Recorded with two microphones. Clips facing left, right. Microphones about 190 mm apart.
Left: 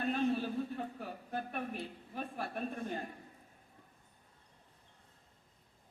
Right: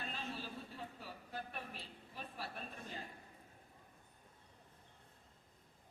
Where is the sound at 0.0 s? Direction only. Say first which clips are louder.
Left 14 dB; 55° left (ahead or behind).